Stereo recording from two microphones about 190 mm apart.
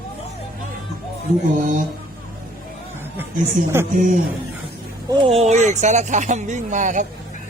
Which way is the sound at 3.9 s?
45° right (ahead or behind).